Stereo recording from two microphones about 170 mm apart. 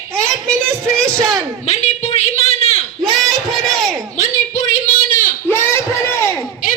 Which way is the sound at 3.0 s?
Centre (ahead or behind).